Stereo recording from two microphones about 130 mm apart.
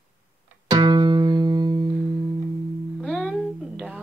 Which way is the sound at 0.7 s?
35° right (ahead or behind).